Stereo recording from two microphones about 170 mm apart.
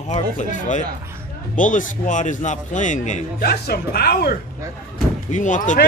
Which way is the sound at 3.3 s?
65° left (ahead or behind).